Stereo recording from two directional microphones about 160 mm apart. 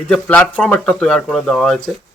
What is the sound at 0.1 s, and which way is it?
Speech, 10° left (ahead or behind).